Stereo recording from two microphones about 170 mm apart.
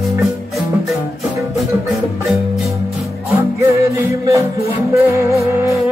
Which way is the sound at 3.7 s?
20° right (ahead or behind).